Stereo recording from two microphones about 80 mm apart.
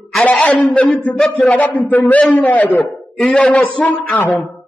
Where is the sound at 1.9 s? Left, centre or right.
Left.